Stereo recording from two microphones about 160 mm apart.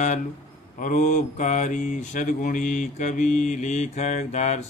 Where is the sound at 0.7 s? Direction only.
50° left (ahead or behind).